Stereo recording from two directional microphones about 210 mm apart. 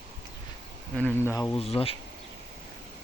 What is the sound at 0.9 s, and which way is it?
Speech, 5° left (ahead or behind).